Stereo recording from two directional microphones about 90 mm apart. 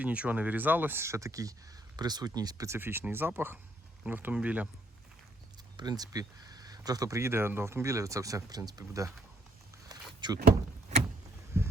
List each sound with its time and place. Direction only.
0.0 s speech: 15° right (ahead or behind); by 1.5 s 40° right (ahead or behind)
2.0 s speech: 50° right (ahead or behind)
2.6 s speech: 25° right (ahead or behind)
5.7 s speech: 45° right (ahead or behind)
10.2 s door: 55° right (ahead or behind)
11.6 s a sound: 25° right (ahead or behind)